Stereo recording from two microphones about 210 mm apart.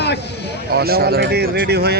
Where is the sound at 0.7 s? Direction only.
45° right (ahead or behind).